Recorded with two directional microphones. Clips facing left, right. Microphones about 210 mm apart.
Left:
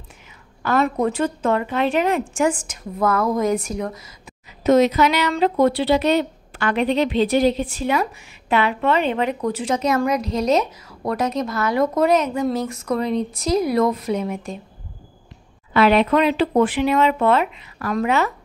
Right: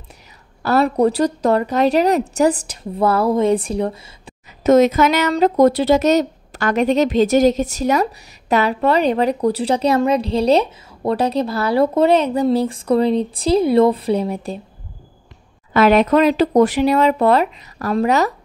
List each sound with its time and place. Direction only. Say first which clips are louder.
0.6 s a woman's voice: right 4 dB; 35° right (ahead or behind)
4.6 s a woman's voice: right 3 dB; 45° right (ahead or behind)
15.7 s a woman's voice: right 3 dB; 45° right (ahead or behind)